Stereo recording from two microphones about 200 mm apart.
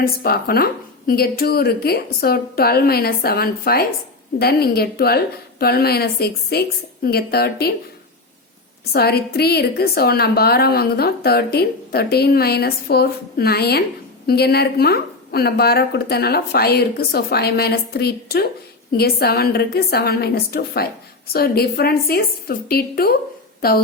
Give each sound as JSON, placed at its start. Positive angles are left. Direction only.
{"t": 0.0, "sound": "a woman's voice", "side_deg": 50}
{"t": 8.9, "sound": "a woman's voice", "side_deg": 50}